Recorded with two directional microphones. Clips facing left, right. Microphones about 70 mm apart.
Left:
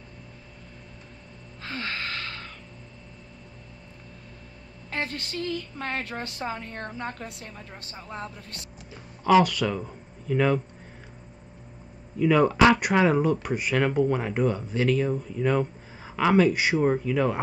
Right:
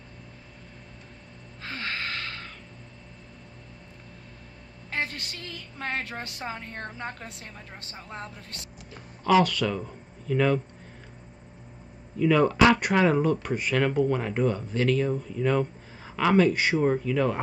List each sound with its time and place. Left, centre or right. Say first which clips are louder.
1.6 s gasp: left 1 dB; right
4.8 s a woman's voice: even; centre
9.2 s speech: left 2 dB; centre
12.2 s speech: left 1 dB; centre